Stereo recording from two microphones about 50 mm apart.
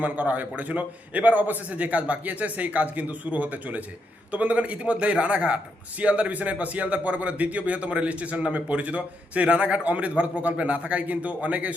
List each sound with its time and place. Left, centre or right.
0.0 s a man's voice: right